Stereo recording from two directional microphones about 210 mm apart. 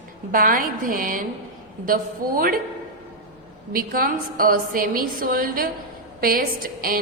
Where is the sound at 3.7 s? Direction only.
45° right (ahead or behind).